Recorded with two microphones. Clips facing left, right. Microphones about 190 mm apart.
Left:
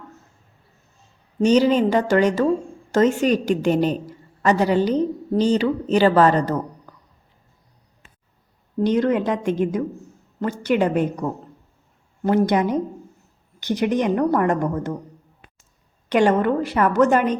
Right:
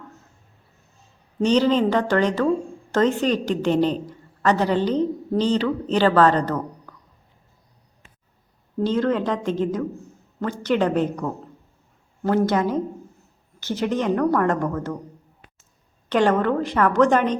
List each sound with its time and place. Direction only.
1.4 s a woman's voice: 10° left (ahead or behind)
8.8 s a woman's voice: 15° left (ahead or behind)
16.0 s a woman's voice: 10° left (ahead or behind)